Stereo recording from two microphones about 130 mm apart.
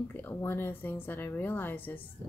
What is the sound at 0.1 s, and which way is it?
A woman's voice, 15° left (ahead or behind).